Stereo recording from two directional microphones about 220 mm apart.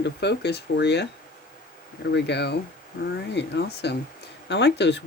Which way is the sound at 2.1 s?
50° left (ahead or behind).